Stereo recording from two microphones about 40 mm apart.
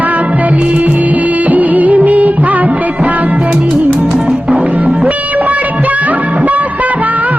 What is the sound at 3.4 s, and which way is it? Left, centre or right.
Music, right.